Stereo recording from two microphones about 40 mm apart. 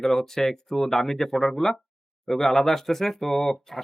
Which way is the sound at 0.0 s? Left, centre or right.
Centre.